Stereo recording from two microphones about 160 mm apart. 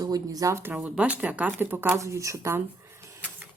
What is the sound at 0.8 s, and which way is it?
Speech, 5° right (ahead or behind).